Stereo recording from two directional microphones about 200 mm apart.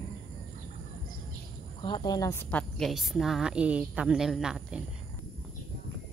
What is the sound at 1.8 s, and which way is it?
Speech, 20° left (ahead or behind).